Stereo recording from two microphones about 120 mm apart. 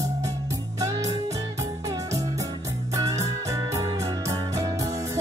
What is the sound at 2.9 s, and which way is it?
Music, 25° right (ahead or behind).